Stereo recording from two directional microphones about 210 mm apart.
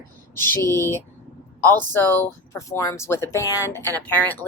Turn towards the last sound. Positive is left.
turn(degrees=10)  # may be behind; listen again after turning